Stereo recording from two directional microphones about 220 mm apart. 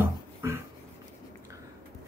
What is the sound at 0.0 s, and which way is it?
Beatboxing, 10° right (ahead or behind).